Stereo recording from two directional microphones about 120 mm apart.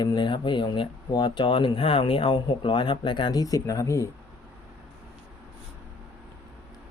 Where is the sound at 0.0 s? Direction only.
40° left (ahead or behind).